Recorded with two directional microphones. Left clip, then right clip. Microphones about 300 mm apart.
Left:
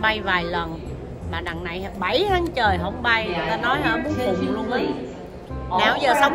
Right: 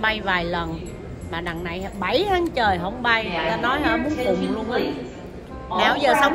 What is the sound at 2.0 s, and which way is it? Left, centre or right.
A woman's voice, centre.